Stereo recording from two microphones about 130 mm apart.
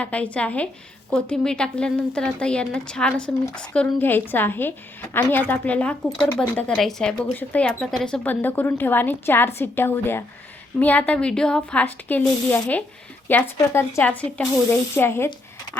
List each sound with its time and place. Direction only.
0.0 s a woman's voice: 10° left (ahead or behind)
7.8 s a woman's voice: centre (ahead or behind); by 15.3 s 20° left (ahead or behind)